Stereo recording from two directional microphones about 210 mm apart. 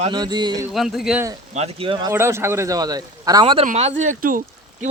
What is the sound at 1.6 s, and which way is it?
Speech, 30° right (ahead or behind).